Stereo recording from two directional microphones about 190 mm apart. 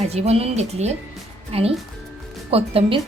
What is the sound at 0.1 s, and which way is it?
Speech, 35° right (ahead or behind).